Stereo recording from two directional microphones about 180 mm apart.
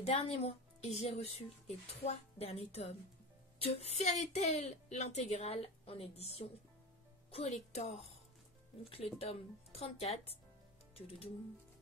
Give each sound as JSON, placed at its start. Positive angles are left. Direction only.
{"t": 0.0, "sound": "a woman's voice", "side_deg": 35}